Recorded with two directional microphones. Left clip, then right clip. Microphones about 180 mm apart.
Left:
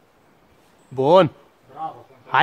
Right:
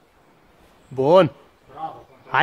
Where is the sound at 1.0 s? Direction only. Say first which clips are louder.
Even; 5° left (ahead or behind).